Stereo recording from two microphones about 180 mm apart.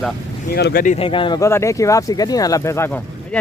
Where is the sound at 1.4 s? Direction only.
15° left (ahead or behind).